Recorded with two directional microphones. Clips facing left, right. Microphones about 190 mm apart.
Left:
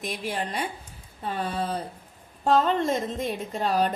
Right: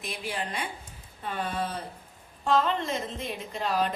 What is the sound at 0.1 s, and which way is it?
Speech, 40° left (ahead or behind).